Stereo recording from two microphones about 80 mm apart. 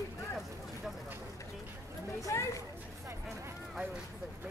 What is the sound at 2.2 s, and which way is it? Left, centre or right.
Speech, left.